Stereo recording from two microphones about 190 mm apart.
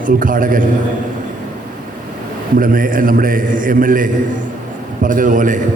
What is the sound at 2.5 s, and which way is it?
A man's voice, 45° right (ahead or behind).